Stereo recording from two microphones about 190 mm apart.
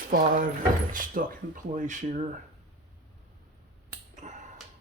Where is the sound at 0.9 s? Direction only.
45° right (ahead or behind).